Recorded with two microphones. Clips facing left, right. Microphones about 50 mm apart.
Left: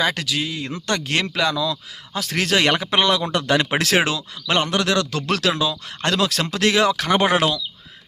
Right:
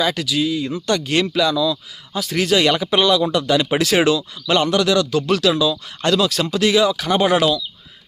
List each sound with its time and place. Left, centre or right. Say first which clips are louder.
0.0 s speech: right 3 dB; left